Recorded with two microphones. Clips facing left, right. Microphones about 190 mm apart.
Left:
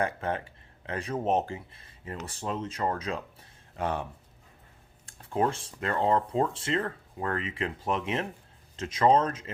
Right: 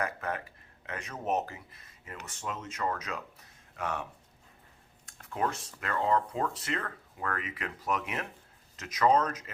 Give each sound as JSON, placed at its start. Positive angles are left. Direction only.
{"t": 0.0, "sound": "speech", "side_deg": 30}
{"t": 5.2, "sound": "speech", "side_deg": 30}